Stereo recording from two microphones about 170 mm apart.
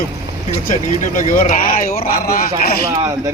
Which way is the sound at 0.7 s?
50° left (ahead or behind).